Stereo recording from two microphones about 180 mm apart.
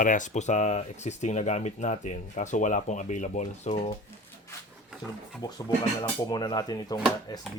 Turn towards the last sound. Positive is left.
turn(degrees=20)  # may be behind; listen again after turning